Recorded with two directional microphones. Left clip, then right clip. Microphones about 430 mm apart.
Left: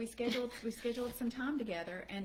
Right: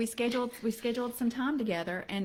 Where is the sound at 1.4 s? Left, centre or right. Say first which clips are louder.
Right 6 dB; right.